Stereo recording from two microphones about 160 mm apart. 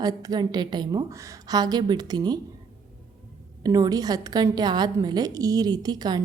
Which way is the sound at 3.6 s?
25° right (ahead or behind).